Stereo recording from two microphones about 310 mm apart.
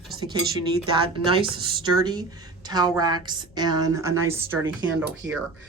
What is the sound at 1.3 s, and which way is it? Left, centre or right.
Speech, centre.